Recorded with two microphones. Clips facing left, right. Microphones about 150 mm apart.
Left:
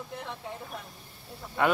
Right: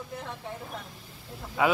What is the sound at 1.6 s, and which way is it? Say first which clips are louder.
Speech: right 1 dB; 5° right (ahead or behind).